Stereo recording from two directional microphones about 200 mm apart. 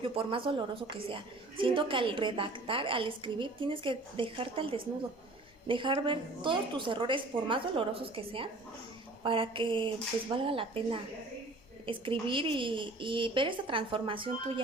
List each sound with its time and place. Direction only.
0.0 s a woman's voice: 25° right (ahead or behind)
11.9 s a woman's voice: 25° right (ahead or behind)